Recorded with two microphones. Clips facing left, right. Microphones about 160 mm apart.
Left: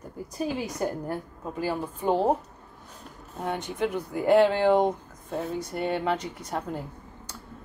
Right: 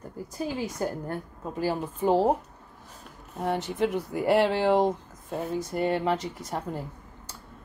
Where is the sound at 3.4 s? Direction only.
5° right (ahead or behind).